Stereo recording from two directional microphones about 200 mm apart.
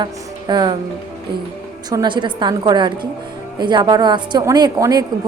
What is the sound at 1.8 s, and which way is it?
Speech, 20° right (ahead or behind).